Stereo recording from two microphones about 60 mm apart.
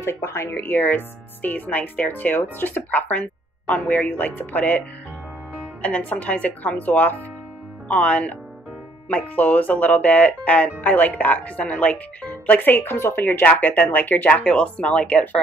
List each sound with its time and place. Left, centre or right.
0.0 s speech: left
0.5 s speech: left
13.2 s speech: left
14.4 s speech: centre